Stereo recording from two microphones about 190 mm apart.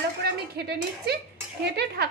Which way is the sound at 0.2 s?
60° right (ahead or behind).